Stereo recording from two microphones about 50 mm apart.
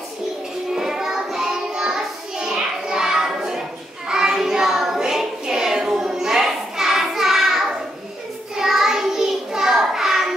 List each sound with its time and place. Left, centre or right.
0.7 s child singing: centre